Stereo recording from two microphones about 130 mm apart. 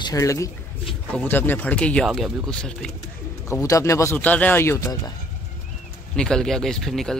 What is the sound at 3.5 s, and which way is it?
Speech, 25° left (ahead or behind).